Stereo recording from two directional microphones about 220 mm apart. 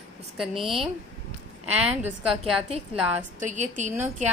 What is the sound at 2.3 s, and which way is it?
A woman's voice, 25° right (ahead or behind).